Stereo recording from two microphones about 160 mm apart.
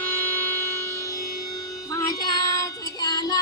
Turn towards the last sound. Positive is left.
turn(degrees=25)  # may be behind; listen again after turning